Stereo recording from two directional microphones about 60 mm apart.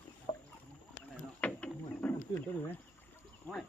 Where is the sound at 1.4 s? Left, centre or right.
Left.